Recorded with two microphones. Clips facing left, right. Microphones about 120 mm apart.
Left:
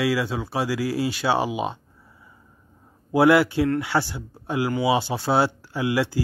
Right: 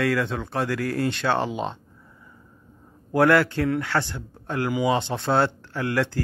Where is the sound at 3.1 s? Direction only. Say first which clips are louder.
Left 2 dB; 10° left (ahead or behind).